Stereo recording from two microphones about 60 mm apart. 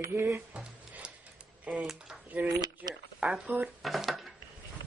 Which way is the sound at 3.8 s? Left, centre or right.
Centre.